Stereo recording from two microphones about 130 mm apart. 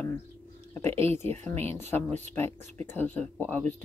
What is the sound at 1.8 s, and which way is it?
Speech, 15° left (ahead or behind).